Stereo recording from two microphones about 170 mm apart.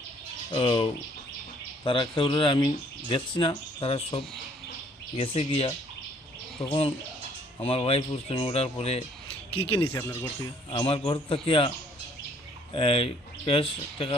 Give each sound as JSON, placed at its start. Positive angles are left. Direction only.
{"t": 0.5, "sound": "speech", "side_deg": 30}
{"t": 9.9, "sound": "speech", "side_deg": 15}
{"t": 10.4, "sound": "speech", "side_deg": 30}
{"t": 12.7, "sound": "speech", "side_deg": 30}